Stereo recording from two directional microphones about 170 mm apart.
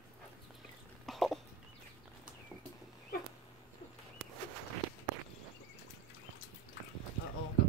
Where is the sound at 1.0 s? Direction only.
Centre (ahead or behind).